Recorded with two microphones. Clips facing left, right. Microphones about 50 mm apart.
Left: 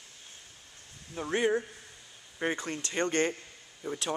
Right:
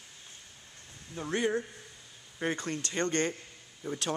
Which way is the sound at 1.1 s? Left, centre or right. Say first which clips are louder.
Left 2 dB; centre.